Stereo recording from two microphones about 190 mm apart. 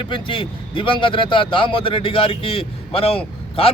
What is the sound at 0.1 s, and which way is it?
A man's voice, 25° left (ahead or behind).